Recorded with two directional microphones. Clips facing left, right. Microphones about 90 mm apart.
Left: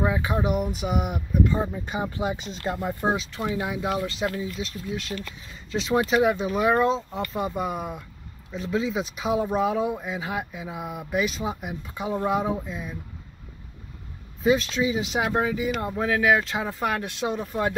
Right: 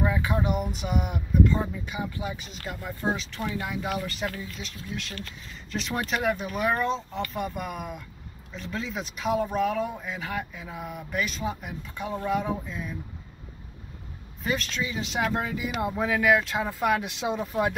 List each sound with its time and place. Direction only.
0.2 s speech: 5° left (ahead or behind)
1.7 s speech: 35° left (ahead or behind)
3.4 s speech: 20° left (ahead or behind)
3.8 s speech: centre (ahead or behind)
7.7 s speech: 30° left (ahead or behind)
8.5 s speech: 5° left (ahead or behind)
14.4 s speech: 5° left (ahead or behind)
17.0 s speech: 15° right (ahead or behind)